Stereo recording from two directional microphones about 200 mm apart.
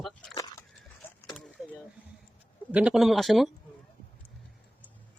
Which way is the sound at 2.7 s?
5° right (ahead or behind).